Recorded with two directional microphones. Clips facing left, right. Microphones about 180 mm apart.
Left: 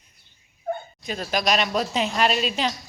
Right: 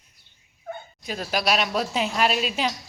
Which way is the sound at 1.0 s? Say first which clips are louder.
Right 3 dB; 5° right (ahead or behind).